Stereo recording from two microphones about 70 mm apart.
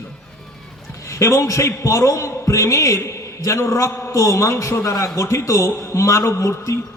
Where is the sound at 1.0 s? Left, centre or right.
Left.